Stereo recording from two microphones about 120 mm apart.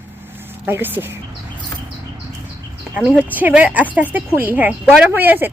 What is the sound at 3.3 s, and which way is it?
A woman's voice, 15° right (ahead or behind).